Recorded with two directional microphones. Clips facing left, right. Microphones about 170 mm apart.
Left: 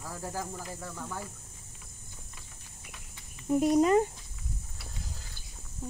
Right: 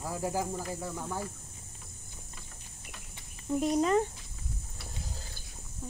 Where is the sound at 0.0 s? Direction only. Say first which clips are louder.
Right 5 dB; 15° right (ahead or behind).